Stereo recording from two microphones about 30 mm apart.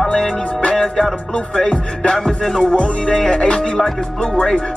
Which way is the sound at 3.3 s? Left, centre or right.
Left.